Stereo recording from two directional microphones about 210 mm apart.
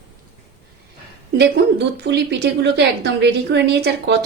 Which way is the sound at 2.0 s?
55° right (ahead or behind).